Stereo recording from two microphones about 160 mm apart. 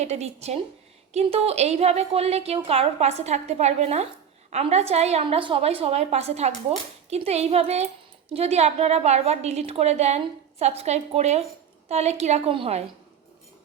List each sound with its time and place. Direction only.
0.0 s a woman's voice: 45° right (ahead or behind)